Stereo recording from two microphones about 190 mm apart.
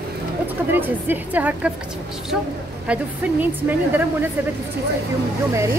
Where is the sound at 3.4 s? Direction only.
10° right (ahead or behind).